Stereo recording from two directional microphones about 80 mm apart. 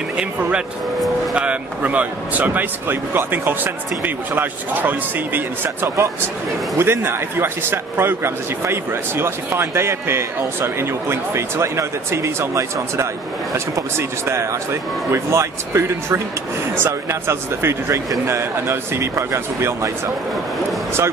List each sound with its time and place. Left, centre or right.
0.2 s a man's voice: centre; by 19.9 s right